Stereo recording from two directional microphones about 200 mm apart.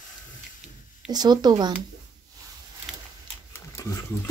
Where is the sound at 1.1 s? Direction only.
20° right (ahead or behind).